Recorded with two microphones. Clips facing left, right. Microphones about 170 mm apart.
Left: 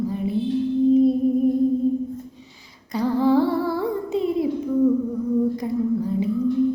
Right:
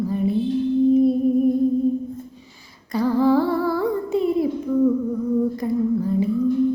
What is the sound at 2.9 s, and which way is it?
Humming, 20° left (ahead or behind).